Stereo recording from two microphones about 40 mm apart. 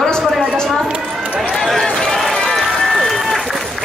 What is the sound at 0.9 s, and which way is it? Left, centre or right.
Run, right.